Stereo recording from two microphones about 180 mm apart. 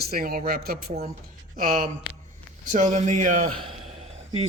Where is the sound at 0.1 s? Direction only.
55° right (ahead or behind).